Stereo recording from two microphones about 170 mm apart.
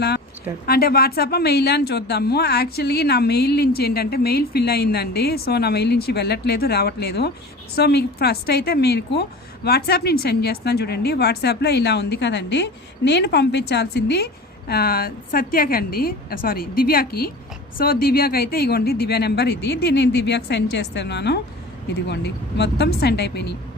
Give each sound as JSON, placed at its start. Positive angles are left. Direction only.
{"t": 0.6, "sound": "speech", "side_deg": 65}
{"t": 14.7, "sound": "a woman's voice", "side_deg": 65}